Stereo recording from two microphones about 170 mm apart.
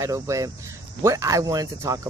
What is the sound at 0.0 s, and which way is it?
Speech, 20° right (ahead or behind).